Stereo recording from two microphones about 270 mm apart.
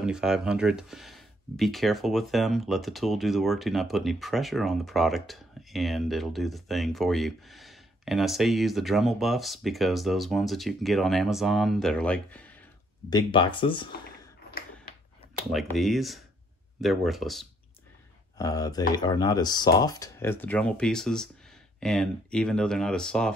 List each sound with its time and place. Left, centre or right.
0.0 s speech: centre
13.1 s speech: centre
15.5 s speech: centre
18.4 s speech: centre